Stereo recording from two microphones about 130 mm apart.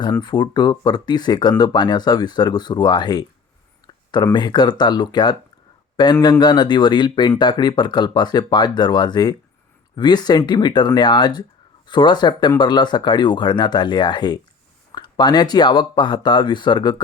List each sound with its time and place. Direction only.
0.0 s speech: 35° left (ahead or behind)